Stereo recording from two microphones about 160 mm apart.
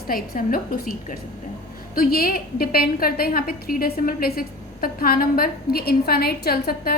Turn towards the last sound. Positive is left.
turn(degrees=70)  # may be behind; listen again after turning